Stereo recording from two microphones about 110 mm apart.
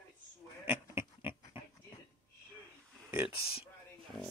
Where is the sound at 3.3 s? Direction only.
60° left (ahead or behind).